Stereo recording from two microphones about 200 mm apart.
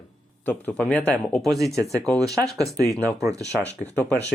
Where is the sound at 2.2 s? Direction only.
15° right (ahead or behind).